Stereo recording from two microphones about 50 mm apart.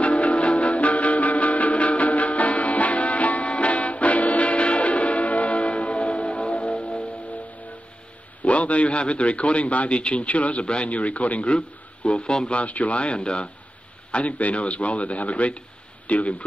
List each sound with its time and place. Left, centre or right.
0.0 s music: left
8.5 s a man's voice: left